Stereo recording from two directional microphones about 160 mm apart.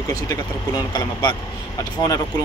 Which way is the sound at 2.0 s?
25° left (ahead or behind).